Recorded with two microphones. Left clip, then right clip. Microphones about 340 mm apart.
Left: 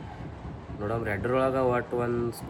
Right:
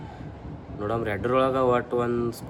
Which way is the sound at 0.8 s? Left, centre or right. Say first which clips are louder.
Right 3 dB; centre.